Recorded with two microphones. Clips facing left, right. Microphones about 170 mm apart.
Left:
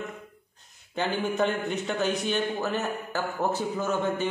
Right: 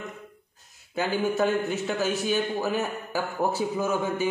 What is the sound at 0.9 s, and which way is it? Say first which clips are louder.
A man's voice: right 2 dB; 5° right (ahead or behind).